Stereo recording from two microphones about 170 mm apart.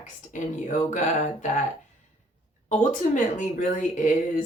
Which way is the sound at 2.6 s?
45° left (ahead or behind).